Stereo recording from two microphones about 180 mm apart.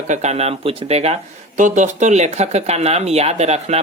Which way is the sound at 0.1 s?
40° right (ahead or behind).